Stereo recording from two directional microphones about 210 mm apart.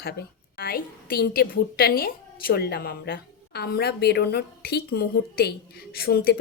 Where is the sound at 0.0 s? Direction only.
50° left (ahead or behind).